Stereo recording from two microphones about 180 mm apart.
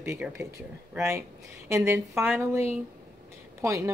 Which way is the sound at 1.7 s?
15° right (ahead or behind).